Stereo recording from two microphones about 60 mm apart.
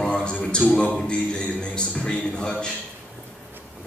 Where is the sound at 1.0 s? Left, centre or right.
Centre.